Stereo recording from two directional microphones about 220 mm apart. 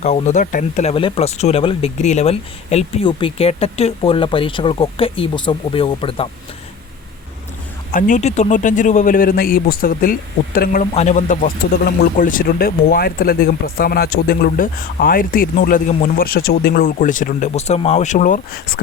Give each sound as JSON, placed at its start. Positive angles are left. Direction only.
{"t": 0.0, "sound": "speech", "side_deg": 30}
{"t": 7.9, "sound": "speech", "side_deg": 35}